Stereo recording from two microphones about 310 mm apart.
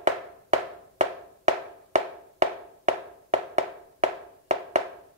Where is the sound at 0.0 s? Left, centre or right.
Right.